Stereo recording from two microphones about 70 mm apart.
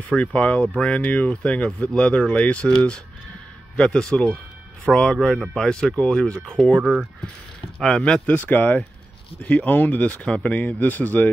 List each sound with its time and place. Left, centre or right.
0.1 s speech: centre
7.8 s speech: centre